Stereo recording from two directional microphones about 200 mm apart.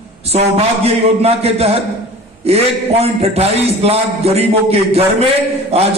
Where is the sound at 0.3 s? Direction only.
30° right (ahead or behind).